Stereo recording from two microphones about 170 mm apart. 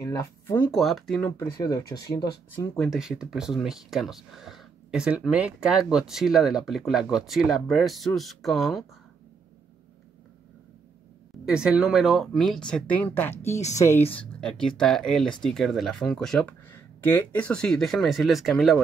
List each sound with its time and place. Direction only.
0.0 s speech: 15° left (ahead or behind)
0.7 s speech: centre (ahead or behind)
1.6 s speech: 20° left (ahead or behind)
2.5 s speech: 10° left (ahead or behind)
2.9 s speech: 5° right (ahead or behind)
11.4 s speech: 5° right (ahead or behind); by 14.0 s 15° left (ahead or behind)
14.1 s speech: 5° left (ahead or behind)